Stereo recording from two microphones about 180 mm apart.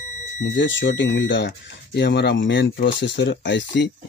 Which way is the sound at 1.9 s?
70° left (ahead or behind).